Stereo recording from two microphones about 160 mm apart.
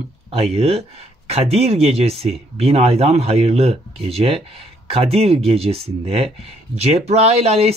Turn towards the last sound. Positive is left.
turn(degrees=-40)  # may be behind; listen again after turning